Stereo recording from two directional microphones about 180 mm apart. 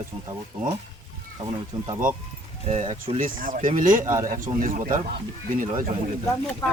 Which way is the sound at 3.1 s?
50° right (ahead or behind).